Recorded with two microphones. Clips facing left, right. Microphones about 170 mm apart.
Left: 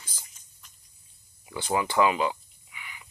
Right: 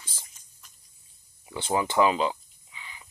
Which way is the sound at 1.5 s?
20° right (ahead or behind).